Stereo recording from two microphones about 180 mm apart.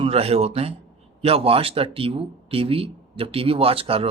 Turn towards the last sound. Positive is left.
turn(degrees=-30)  # may be behind; listen again after turning